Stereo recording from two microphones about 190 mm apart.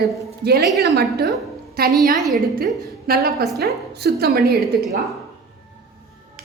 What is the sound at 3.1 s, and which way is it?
A woman's voice, 55° right (ahead or behind).